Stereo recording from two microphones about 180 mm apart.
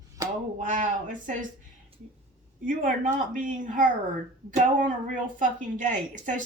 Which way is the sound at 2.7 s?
45° right (ahead or behind).